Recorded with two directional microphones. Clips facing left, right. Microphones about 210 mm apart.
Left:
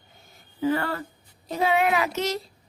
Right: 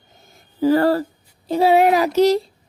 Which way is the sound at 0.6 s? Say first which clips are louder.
Right 10 dB; 35° right (ahead or behind).